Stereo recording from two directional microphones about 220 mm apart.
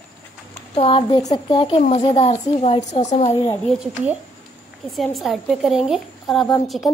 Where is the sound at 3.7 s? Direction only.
Centre (ahead or behind).